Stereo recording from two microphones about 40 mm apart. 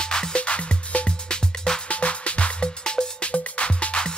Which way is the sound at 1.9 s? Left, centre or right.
Left.